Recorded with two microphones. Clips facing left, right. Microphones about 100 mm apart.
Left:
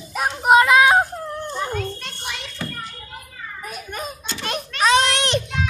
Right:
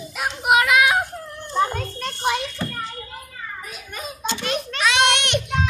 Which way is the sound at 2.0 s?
45° right (ahead or behind).